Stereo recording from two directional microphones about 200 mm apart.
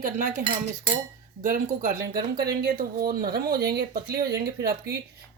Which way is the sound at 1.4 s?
45° right (ahead or behind).